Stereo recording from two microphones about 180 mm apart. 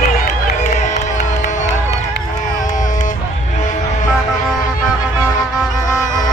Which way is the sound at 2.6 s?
45° left (ahead or behind).